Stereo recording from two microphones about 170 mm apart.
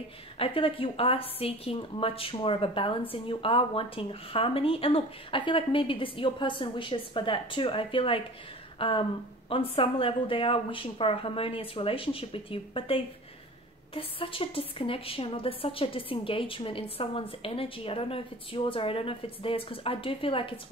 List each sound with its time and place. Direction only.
0.4 s a woman's voice: 30° left (ahead or behind)